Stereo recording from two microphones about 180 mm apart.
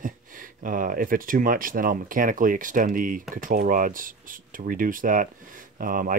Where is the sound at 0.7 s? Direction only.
50° right (ahead or behind).